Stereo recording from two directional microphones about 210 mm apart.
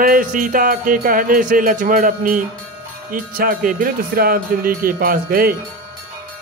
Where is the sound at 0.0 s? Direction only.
40° right (ahead or behind).